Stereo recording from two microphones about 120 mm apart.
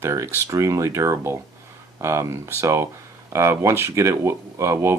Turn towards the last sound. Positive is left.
turn(degrees=-20)  # may be behind; listen again after turning